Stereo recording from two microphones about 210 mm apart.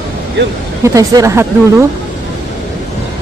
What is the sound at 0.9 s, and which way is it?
Speech, 15° right (ahead or behind).